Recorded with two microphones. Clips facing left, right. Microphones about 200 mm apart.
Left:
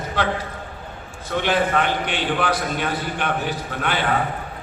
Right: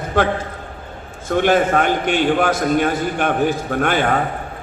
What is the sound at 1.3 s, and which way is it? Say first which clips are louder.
A man's voice: right 5 dB; 45° right (ahead or behind).